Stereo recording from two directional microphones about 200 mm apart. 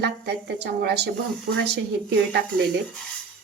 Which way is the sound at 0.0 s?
60° right (ahead or behind).